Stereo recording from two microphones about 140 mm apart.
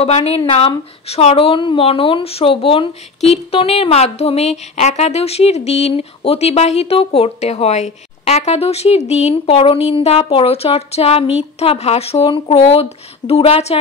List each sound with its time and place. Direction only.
0.0 s speech: 45° left (ahead or behind)